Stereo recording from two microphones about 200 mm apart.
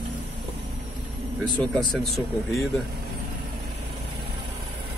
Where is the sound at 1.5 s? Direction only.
5° left (ahead or behind).